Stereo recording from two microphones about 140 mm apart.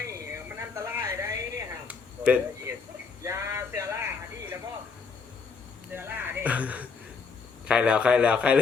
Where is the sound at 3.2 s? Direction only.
20° right (ahead or behind).